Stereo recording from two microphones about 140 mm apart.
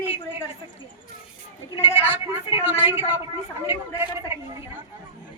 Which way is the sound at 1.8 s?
15° right (ahead or behind).